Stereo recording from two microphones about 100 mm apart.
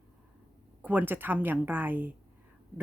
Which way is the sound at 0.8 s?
15° right (ahead or behind).